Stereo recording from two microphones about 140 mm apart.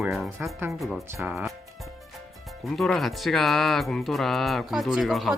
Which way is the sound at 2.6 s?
Centre (ahead or behind).